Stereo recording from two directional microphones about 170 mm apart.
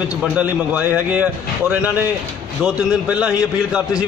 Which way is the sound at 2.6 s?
5° right (ahead or behind).